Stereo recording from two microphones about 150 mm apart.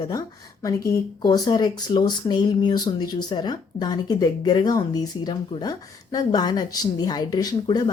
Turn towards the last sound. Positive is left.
turn(degrees=30)  # may be behind; listen again after turning